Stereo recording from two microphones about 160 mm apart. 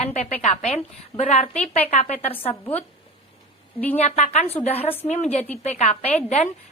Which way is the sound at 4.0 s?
45° left (ahead or behind).